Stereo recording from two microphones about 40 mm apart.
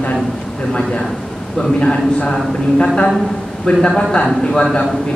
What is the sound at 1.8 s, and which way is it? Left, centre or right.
Speech, left.